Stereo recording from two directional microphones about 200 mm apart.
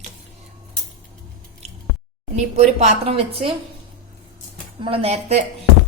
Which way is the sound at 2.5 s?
30° right (ahead or behind).